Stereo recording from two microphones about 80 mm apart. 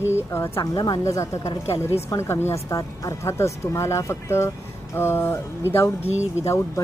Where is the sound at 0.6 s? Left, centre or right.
Left.